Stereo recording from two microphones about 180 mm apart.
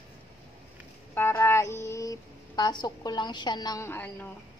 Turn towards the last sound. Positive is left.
turn(degrees=10)  # may be behind; listen again after turning